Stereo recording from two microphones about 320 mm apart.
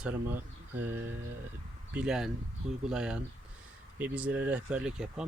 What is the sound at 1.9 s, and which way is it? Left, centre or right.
Speech, centre.